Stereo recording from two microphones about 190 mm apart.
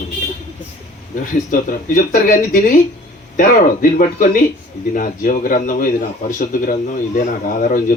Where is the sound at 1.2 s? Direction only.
45° left (ahead or behind).